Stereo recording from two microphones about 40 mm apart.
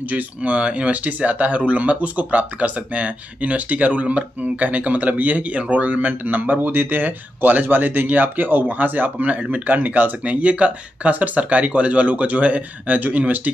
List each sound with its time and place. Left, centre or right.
0.1 s speech: right
7.6 s speech: right